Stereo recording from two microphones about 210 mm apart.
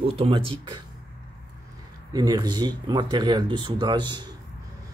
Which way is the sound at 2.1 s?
20° right (ahead or behind).